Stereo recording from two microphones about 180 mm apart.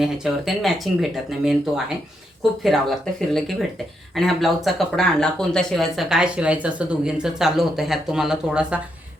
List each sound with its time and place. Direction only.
0.0 s speech: centre (ahead or behind)